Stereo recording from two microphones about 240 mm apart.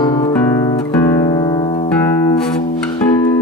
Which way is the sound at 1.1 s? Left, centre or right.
Centre.